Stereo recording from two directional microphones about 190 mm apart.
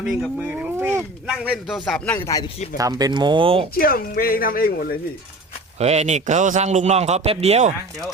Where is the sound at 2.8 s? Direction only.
20° right (ahead or behind).